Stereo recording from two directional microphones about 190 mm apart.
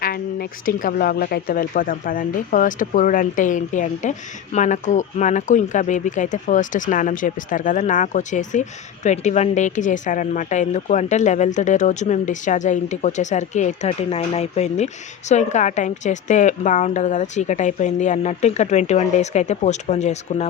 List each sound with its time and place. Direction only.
0.0 s a woman's voice: 50° left (ahead or behind)